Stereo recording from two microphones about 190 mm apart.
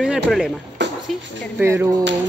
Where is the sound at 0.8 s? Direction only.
70° right (ahead or behind).